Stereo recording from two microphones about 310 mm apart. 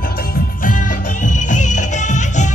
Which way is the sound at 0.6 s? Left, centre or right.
Left.